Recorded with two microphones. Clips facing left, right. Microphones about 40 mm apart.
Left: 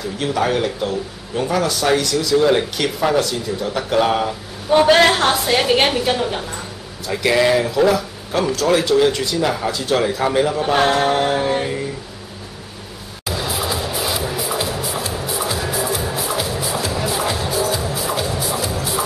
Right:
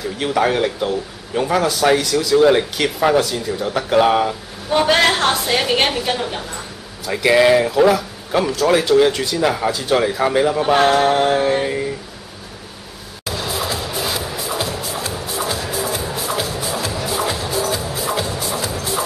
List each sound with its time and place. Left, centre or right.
0.2 s a man's voice: centre
4.6 s a woman's voice: centre
7.1 s a man's voice: centre
13.3 s music: centre
18.2 s music: centre